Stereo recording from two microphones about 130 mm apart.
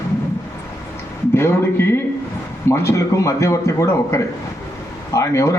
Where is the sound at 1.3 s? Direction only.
20° left (ahead or behind).